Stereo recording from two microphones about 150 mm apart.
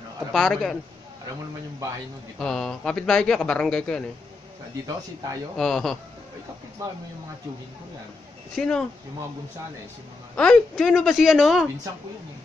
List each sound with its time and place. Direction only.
0.3 s a man's voice: centre (ahead or behind)
2.3 s a man's voice: centre (ahead or behind)
4.8 s speech: 20° right (ahead or behind)
5.6 s a man's voice: centre (ahead or behind)
8.5 s a man's voice: 5° left (ahead or behind)
10.3 s a man's voice: 5° left (ahead or behind)